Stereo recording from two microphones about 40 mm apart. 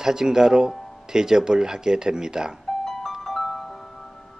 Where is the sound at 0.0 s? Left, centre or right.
Centre.